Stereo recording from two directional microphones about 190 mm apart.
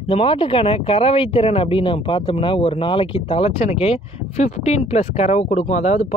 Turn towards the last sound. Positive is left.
turn(degrees=35)  # may be behind; listen again after turning